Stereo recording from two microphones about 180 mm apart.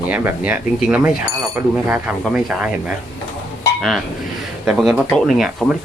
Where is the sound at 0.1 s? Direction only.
10° right (ahead or behind).